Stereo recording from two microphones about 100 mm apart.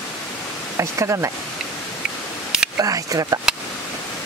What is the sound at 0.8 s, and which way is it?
Speech, 30° right (ahead or behind).